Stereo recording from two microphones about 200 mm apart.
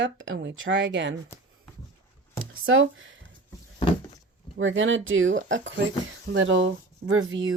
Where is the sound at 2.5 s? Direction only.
80° right.